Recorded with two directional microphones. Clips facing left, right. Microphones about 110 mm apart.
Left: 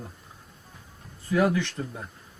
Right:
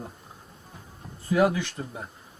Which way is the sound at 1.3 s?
10° right (ahead or behind).